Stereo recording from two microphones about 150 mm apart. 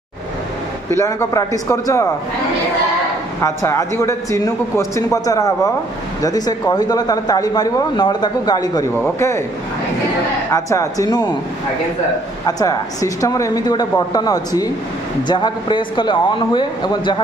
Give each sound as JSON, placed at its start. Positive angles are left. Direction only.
{"t": 0.8, "sound": "speech", "side_deg": 20}
{"t": 3.4, "sound": "speech", "side_deg": 20}
{"t": 10.5, "sound": "speech", "side_deg": 20}
{"t": 12.4, "sound": "speech", "side_deg": 25}